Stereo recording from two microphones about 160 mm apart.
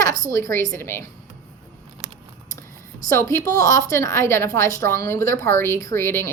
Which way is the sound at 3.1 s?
15° left (ahead or behind).